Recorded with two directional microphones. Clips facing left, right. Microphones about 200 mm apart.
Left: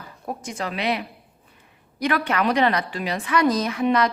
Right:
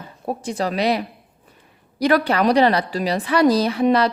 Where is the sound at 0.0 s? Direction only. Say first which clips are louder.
Right 5 dB; 30° right (ahead or behind).